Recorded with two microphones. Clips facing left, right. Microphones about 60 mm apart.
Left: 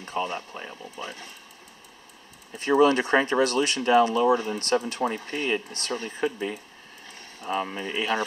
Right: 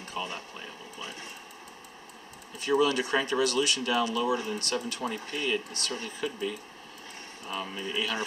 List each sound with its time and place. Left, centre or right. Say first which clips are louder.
0.0 s speech: left 6 dB; left
2.5 s speech: left 6 dB; left